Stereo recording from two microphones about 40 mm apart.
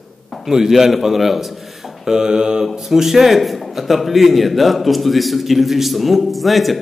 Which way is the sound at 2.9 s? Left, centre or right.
Centre.